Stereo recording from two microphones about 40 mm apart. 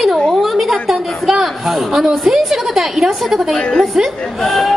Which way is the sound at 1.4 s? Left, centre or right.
Centre.